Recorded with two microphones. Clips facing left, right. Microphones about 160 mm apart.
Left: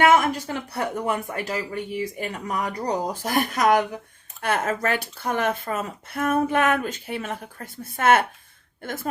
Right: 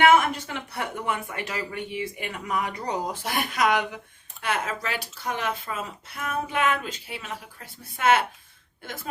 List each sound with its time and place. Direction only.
0.4 s speech: 40° left (ahead or behind)